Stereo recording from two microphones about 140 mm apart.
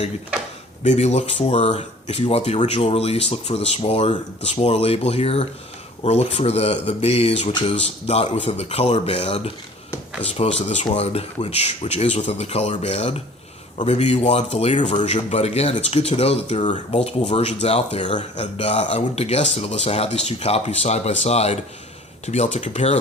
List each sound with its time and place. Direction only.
0.9 s speech: 50° left (ahead or behind)